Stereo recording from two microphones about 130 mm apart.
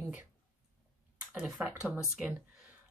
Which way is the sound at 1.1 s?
5° right (ahead or behind).